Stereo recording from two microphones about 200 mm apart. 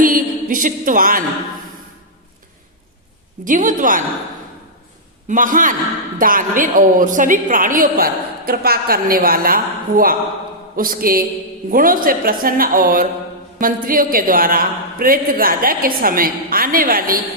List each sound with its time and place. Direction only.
0.0 s a sound: 45° right (ahead or behind)
3.4 s a woman's voice: 40° right (ahead or behind)
5.3 s a woman's voice: 40° right (ahead or behind)